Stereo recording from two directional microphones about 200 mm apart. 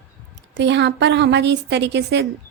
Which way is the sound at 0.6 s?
60° right (ahead or behind).